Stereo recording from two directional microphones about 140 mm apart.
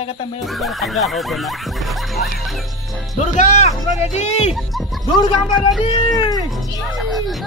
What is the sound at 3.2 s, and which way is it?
Speech, 55° left (ahead or behind).